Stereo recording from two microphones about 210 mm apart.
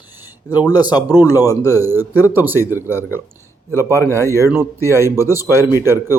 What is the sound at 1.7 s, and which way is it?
Speech, 10° right (ahead or behind).